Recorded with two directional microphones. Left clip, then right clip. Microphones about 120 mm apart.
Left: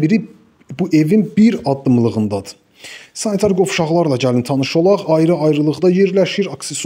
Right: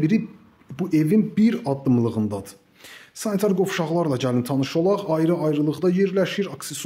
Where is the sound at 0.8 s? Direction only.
35° left (ahead or behind).